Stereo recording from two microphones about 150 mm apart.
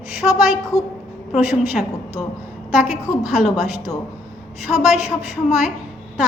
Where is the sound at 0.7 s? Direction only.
20° left (ahead or behind).